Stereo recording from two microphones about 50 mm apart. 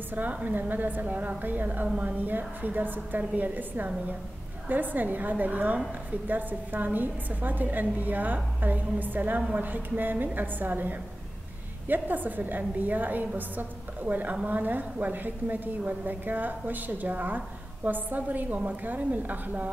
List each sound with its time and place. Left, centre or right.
0.1 s a woman's voice: right